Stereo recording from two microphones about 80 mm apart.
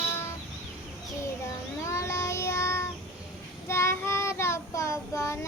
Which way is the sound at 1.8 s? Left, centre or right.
Left.